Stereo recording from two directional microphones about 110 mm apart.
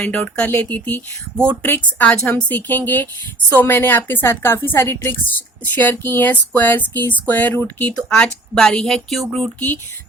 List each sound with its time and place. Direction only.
0.0 s a woman's voice: 10° left (ahead or behind)